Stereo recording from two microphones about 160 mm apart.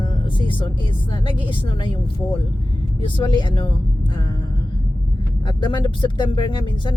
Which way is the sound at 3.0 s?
30° left (ahead or behind).